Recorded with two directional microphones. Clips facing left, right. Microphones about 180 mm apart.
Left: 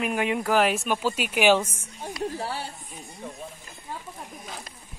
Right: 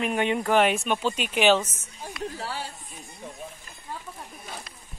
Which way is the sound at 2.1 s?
30° left (ahead or behind).